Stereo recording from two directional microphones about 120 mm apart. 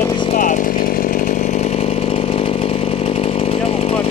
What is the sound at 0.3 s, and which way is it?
Chainsaw, 90° left.